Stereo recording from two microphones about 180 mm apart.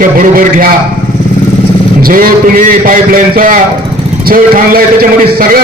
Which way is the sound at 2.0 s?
55° right (ahead or behind).